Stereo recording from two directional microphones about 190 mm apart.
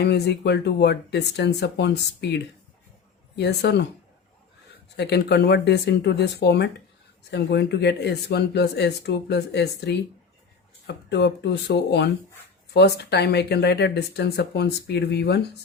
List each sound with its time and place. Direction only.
0.0 s speech: 60° left (ahead or behind)
4.9 s speech: 60° left (ahead or behind)